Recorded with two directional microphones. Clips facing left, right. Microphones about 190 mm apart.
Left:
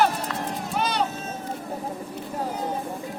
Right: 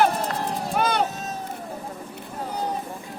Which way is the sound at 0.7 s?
55° right (ahead or behind).